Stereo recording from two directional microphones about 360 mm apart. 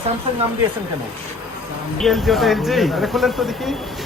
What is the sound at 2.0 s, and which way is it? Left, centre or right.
Speech, centre.